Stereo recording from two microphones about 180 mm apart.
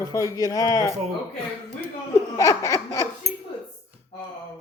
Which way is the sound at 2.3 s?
20° left (ahead or behind).